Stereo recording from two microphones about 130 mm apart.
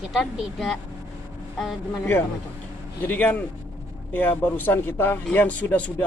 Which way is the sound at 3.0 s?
10° left (ahead or behind).